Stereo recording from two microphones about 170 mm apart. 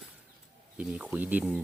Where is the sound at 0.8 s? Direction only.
10° right (ahead or behind).